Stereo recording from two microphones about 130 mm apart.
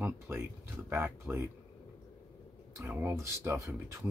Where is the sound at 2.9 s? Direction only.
15° right (ahead or behind).